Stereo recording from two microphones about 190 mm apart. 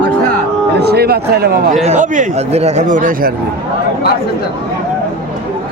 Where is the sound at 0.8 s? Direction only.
60° right (ahead or behind).